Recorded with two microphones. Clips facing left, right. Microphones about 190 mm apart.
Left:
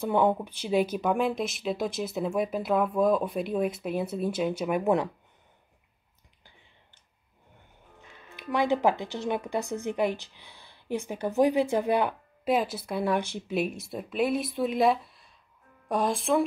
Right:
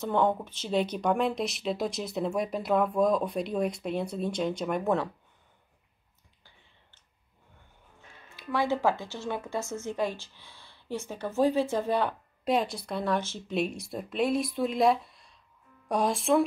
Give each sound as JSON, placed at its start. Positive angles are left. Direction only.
{"t": 0.0, "sound": "speech", "side_deg": 10}
{"t": 8.4, "sound": "speech", "side_deg": 20}
{"t": 13.7, "sound": "speech", "side_deg": 0}